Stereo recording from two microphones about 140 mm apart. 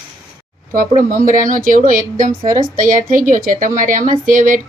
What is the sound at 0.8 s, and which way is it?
Speech, 75° right (ahead or behind).